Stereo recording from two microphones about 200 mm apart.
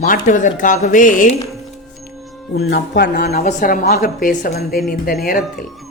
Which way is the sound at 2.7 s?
55° left (ahead or behind).